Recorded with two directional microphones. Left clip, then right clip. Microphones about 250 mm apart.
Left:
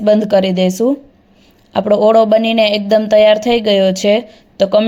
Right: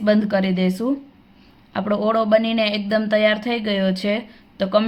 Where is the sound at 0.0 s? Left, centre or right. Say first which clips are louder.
Left 8 dB; centre.